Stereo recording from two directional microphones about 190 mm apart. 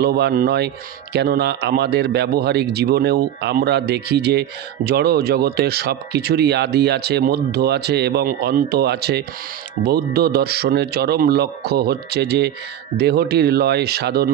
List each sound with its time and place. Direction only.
0.0 s speech: 55° right (ahead or behind)